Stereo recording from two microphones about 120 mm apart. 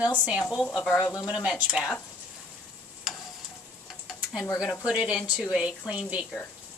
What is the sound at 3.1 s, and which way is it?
Stir, centre (ahead or behind).